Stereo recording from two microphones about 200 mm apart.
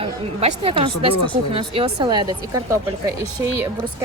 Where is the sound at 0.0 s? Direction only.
30° right (ahead or behind).